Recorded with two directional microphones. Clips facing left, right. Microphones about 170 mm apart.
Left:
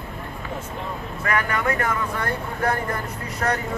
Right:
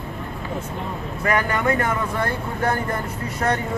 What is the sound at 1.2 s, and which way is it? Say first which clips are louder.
Speech: right 3 dB; 25° right (ahead or behind).